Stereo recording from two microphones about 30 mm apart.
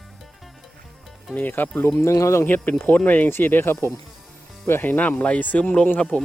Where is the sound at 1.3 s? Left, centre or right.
Left.